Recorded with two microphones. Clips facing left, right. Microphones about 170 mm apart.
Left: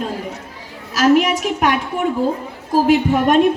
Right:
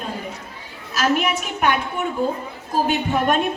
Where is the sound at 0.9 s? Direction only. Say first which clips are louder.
Left 7 dB; 90° left.